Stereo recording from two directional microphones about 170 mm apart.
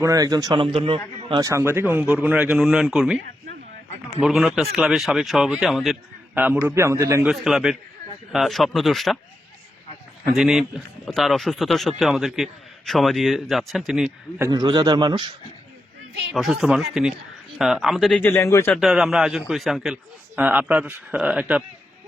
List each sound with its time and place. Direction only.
0.0 s speech: 20° right (ahead or behind)
1.3 s speech: 20° right (ahead or behind); by 3.2 s 5° right (ahead or behind)
4.2 s a man's voice: 5° right (ahead or behind)
7.3 s speech: centre (ahead or behind)
10.2 s speech: centre (ahead or behind)
14.4 s speech: 25° right (ahead or behind)
16.3 s a man's voice: centre (ahead or behind); by 18.7 s 15° left (ahead or behind)
18.7 s speech: centre (ahead or behind)